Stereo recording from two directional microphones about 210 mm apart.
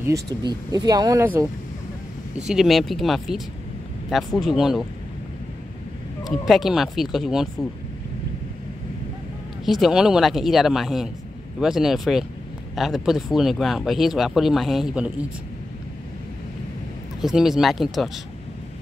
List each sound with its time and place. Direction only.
0.0 s speech: 15° right (ahead or behind); by 4.8 s centre (ahead or behind)
6.2 s speech: centre (ahead or behind)
9.7 s speech: centre (ahead or behind)
17.2 s speech: centre (ahead or behind)